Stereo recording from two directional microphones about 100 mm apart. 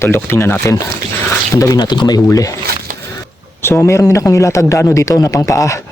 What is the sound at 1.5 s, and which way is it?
Speech, 35° left (ahead or behind).